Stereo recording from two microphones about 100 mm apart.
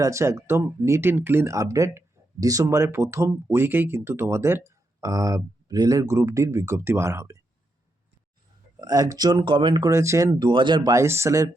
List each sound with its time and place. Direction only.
0.0 s speech: 30° right (ahead or behind)
4.9 s speech: 40° right (ahead or behind)
8.8 s speech: 40° right (ahead or behind)
9.9 s speech: 30° right (ahead or behind)
10.4 s speech: 50° right (ahead or behind)
10.9 s speech: 25° right (ahead or behind)